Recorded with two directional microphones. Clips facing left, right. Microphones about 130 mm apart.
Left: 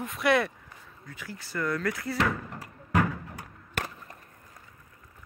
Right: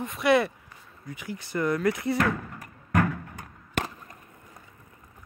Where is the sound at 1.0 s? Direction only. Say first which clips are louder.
Right 6 dB; 15° right (ahead or behind).